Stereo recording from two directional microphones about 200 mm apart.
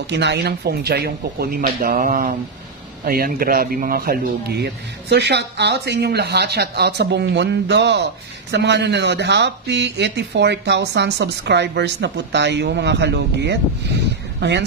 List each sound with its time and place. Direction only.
0.1 s speech: 60° right (ahead or behind)